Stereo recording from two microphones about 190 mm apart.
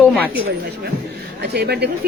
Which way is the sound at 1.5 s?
55° right (ahead or behind).